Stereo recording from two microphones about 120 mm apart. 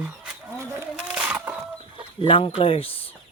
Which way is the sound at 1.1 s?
10° right (ahead or behind).